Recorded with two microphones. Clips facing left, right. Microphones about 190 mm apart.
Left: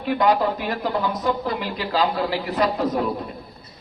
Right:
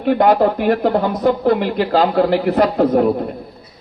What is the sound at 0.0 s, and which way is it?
Speech, 55° right (ahead or behind).